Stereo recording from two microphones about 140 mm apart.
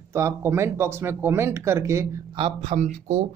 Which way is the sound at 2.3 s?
45° right (ahead or behind).